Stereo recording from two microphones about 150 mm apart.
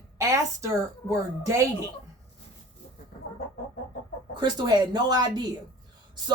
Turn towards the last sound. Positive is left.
turn(degrees=-30)  # may be behind; listen again after turning